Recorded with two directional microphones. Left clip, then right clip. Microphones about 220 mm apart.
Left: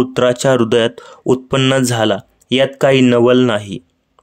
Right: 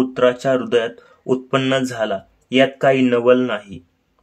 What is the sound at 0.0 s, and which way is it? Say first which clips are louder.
Speech: left 3 dB; 40° left (ahead or behind).